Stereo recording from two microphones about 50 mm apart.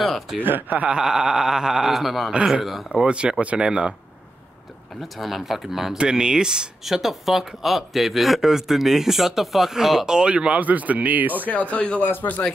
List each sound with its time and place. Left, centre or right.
0.0 s speech: centre
0.4 s speech: right
0.8 s speech: centre
2.9 s speech: right
5.0 s speech: centre
6.8 s speech: centre
10.3 s speech: right
11.4 s speech: left
12.0 s speech: left